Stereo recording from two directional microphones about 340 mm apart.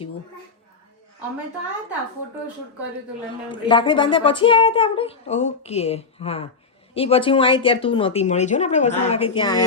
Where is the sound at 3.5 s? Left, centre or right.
Centre.